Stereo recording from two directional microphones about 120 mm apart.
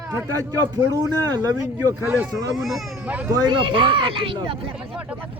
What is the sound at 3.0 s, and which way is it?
Speech, 15° right (ahead or behind).